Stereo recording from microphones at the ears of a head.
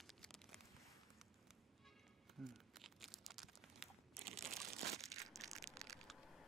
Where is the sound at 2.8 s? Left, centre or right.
Right.